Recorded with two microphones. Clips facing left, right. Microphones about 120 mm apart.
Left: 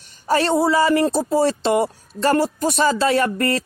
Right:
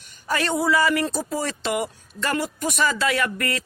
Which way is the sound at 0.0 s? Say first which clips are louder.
Left 6 dB; 35° left (ahead or behind).